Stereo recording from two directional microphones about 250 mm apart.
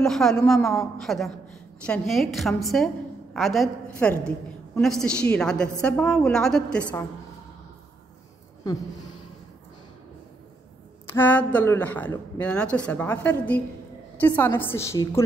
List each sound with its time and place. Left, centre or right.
0.0 s a woman's voice: centre
11.1 s a woman's voice: centre